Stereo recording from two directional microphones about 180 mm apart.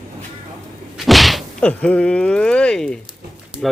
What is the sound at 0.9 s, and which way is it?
Speech, centre (ahead or behind).